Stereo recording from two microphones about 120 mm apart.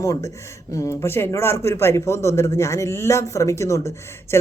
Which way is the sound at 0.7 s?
20° left (ahead or behind).